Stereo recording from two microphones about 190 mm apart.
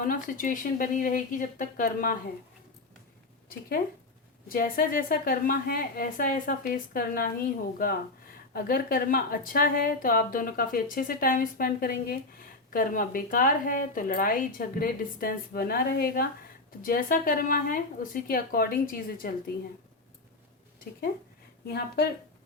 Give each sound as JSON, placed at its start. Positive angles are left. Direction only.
{"t": 0.0, "sound": "a woman's voice", "side_deg": 45}
{"t": 4.4, "sound": "a woman's voice", "side_deg": 50}
{"t": 21.7, "sound": "speech", "side_deg": 60}